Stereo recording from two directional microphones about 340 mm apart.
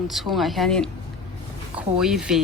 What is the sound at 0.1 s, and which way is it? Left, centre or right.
Speech, centre.